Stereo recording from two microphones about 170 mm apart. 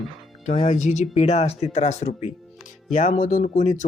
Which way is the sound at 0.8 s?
45° left (ahead or behind).